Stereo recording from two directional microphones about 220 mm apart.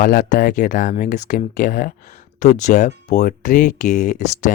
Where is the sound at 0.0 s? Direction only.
40° left (ahead or behind).